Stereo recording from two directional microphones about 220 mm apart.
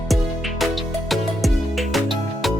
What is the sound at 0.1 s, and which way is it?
Music, centre (ahead or behind).